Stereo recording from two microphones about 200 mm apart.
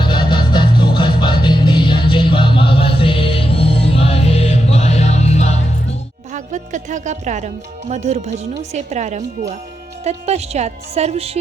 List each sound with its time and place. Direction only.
0.1 s music: 25° left (ahead or behind)
6.3 s a woman's voice: 40° right (ahead or behind)